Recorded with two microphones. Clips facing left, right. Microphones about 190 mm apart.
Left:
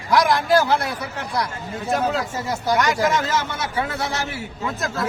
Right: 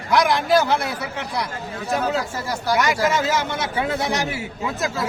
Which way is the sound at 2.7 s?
10° right (ahead or behind).